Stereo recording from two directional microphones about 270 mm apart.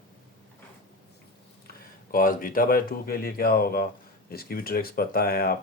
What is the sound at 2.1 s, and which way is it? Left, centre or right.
Speech, left.